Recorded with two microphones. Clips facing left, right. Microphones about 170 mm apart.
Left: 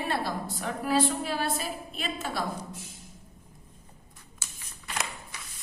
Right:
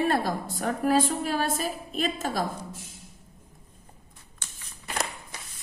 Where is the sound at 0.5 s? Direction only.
45° right (ahead or behind).